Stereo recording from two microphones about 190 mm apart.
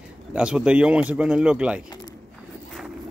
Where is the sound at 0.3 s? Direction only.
5° right (ahead or behind).